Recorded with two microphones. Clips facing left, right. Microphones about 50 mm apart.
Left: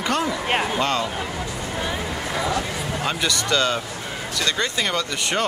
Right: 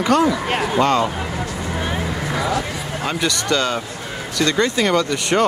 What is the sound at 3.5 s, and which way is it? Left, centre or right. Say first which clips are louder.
Speech: right 1 dB; right.